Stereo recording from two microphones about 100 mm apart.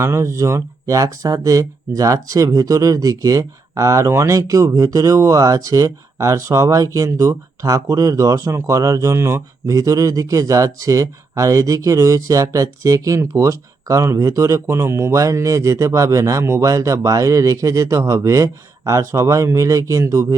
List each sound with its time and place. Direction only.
0.0 s speech: 30° right (ahead or behind)